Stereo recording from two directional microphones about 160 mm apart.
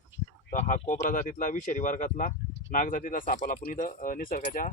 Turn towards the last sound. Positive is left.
turn(degrees=60)  # may be behind; listen again after turning